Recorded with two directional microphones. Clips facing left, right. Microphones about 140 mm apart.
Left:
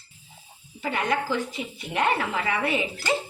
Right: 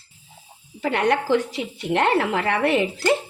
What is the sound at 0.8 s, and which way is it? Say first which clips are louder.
Speech: right 5 dB; 70° right (ahead or behind).